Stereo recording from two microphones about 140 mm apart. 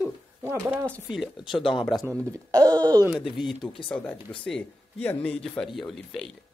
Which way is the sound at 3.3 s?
Centre (ahead or behind).